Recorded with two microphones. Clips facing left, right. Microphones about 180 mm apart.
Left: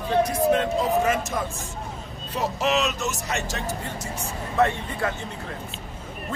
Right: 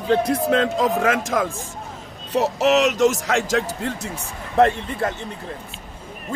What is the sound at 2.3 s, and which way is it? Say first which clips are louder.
A man's voice: right 7 dB; 75° right (ahead or behind).